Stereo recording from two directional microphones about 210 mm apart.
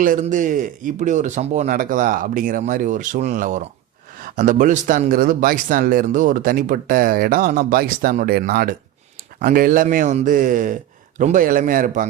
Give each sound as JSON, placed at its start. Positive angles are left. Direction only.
{"t": 0.0, "sound": "a man's voice", "side_deg": -40}